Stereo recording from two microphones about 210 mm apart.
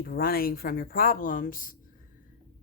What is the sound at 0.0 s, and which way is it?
Speech, 45° left (ahead or behind).